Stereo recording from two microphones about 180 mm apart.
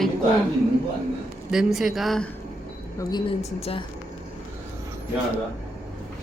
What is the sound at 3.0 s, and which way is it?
Speech, 25° left (ahead or behind).